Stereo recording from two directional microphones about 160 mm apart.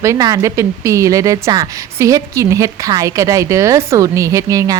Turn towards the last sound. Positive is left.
turn(degrees=-20)  # may be behind; listen again after turning